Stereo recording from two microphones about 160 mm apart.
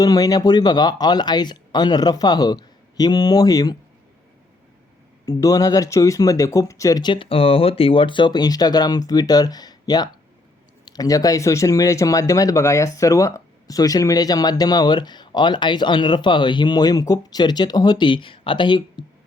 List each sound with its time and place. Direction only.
0.0 s speech: 25° left (ahead or behind)
5.2 s speech: 20° left (ahead or behind)